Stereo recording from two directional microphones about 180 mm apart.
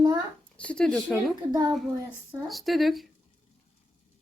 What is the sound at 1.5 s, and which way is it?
Speech, 25° right (ahead or behind).